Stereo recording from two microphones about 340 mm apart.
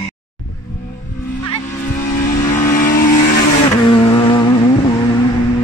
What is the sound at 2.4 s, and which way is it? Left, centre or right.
Vehicle, centre.